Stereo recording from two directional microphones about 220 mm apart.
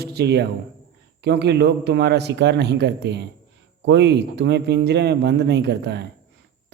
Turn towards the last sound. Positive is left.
turn(degrees=-50)  # may be behind; listen again after turning